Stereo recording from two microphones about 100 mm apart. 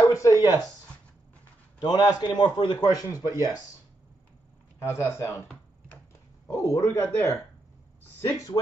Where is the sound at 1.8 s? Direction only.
45° left (ahead or behind).